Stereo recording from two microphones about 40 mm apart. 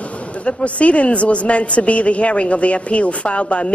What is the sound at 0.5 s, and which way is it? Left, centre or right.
A woman's voice, left.